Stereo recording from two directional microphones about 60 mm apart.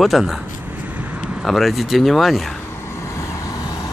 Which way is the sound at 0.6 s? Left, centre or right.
Right.